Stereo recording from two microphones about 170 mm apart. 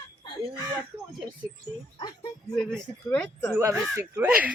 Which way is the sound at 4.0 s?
15° right (ahead or behind).